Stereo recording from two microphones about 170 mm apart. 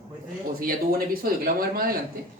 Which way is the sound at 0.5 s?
60° right (ahead or behind).